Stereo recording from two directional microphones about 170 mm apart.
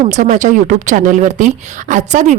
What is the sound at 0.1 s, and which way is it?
Speech, 50° right (ahead or behind).